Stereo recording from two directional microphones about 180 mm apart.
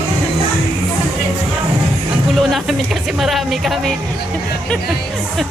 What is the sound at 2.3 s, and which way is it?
Speech, centre (ahead or behind).